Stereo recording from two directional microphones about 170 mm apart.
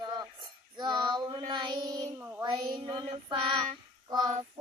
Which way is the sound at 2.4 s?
25° right (ahead or behind).